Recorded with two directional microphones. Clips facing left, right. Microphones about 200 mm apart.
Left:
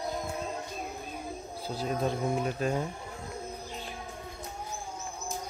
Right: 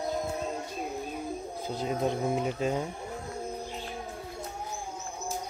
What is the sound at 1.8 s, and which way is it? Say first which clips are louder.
Speech: right 1 dB; 20° right (ahead or behind).